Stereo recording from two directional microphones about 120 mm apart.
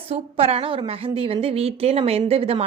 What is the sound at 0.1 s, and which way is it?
A woman's voice, 55° right (ahead or behind).